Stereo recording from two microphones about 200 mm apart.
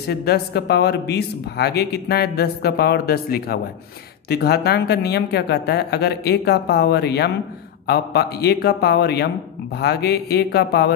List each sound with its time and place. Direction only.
0.1 s speech: 55° left (ahead or behind)